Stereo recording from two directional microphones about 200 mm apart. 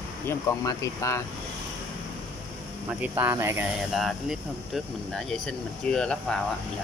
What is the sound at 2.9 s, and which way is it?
Speech, 10° right (ahead or behind).